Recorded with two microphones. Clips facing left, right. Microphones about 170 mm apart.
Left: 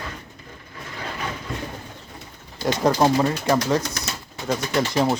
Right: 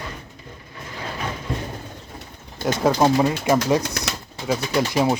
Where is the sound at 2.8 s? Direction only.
5° right (ahead or behind).